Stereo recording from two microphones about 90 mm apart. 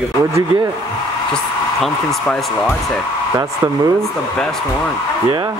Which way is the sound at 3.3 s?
45° right (ahead or behind).